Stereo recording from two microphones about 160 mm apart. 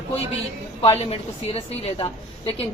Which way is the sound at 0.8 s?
40° left (ahead or behind).